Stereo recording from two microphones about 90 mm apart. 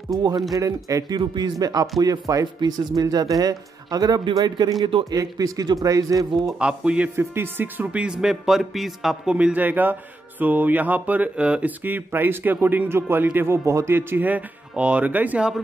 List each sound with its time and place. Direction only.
0.8 s speech: 45° right (ahead or behind)
6.6 s speech: 10° right (ahead or behind)
7.2 s speech: 25° right (ahead or behind)